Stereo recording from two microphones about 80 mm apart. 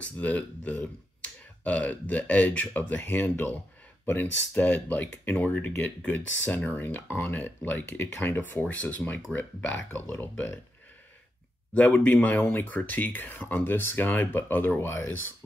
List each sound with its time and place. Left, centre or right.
0.2 s speech: centre
6.8 s speech: left
11.7 s speech: centre